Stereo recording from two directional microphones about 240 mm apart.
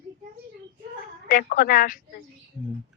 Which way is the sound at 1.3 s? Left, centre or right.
Left.